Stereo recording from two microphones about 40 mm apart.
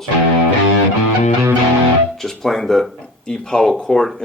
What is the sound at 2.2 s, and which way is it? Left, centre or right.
Speech, centre.